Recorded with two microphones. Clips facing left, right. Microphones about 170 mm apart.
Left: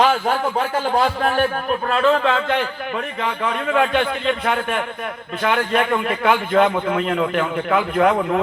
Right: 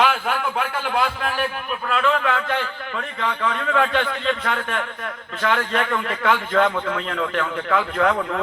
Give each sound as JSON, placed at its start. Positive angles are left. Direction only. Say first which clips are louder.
{"t": 0.0, "sound": "a man's voice", "louder": "left 4 dB", "side_deg": 40}
{"t": 6.7, "sound": "speech", "louder": "left 3 dB", "side_deg": 25}
{"t": 6.9, "sound": "a man's voice", "louder": "left 5 dB", "side_deg": 15}